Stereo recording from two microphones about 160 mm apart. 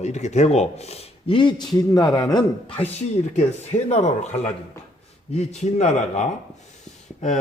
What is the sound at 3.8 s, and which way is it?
A man's voice, 45° left (ahead or behind).